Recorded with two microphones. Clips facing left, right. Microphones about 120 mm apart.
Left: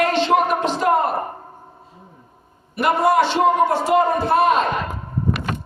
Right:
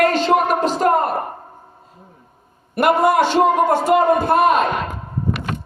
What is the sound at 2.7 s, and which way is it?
A man's voice, 50° right (ahead or behind).